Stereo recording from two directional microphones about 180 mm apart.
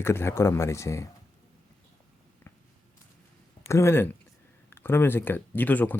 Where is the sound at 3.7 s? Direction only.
15° left (ahead or behind).